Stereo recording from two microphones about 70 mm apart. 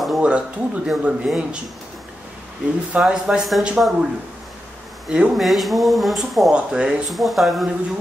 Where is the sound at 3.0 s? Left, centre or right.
Centre.